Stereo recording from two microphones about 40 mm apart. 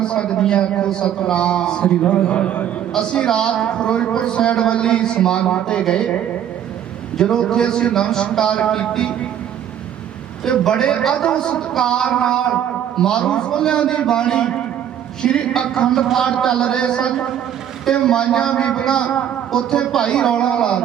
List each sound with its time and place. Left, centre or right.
0.0 s a man's voice: left
7.2 s a man's voice: centre
10.7 s a man's voice: left